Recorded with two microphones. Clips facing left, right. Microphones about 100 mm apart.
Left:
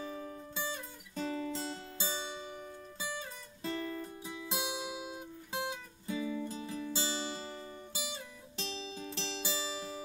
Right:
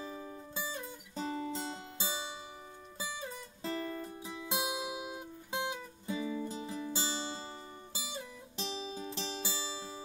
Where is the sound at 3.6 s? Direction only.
5° right (ahead or behind).